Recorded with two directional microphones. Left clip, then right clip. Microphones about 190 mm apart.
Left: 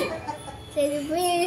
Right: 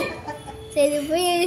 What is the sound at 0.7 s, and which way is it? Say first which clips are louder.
Child singing: right 5 dB; 45° right (ahead or behind).